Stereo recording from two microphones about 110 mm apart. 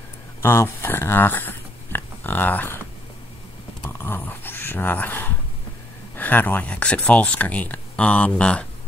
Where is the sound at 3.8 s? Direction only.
20° left (ahead or behind).